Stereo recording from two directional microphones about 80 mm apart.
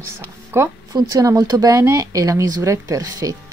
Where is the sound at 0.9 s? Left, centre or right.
Right.